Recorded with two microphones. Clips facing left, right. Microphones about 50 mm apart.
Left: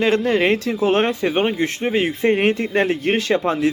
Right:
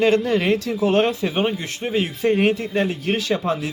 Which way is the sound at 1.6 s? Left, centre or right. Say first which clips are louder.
Left 4 dB; left.